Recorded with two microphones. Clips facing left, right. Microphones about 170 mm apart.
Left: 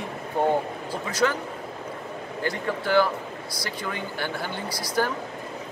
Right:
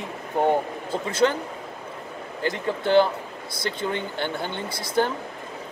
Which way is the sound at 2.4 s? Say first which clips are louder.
Right 3 dB; 25° right (ahead or behind).